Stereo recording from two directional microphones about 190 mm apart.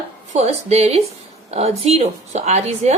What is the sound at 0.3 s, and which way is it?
Speech, 35° right (ahead or behind).